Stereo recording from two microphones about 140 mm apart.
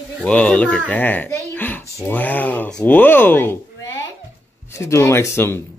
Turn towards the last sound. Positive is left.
turn(degrees=15)  # may be behind; listen again after turning